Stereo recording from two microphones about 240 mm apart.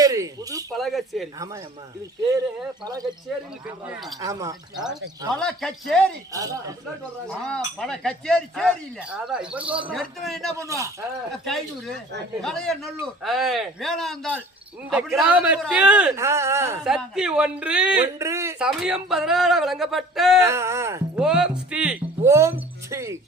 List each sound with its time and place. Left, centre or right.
0.0 s speech: centre
0.8 s a man's voice: centre
2.8 s speech: centre
4.2 s speech: centre
5.3 s a man's voice: centre
6.3 s speech: centre
7.3 s a man's voice: centre
10.6 s speech: centre
12.4 s a man's voice: centre
20.4 s speech: centre